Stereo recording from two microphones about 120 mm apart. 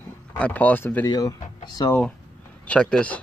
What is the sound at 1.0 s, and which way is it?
Speech, 35° left (ahead or behind).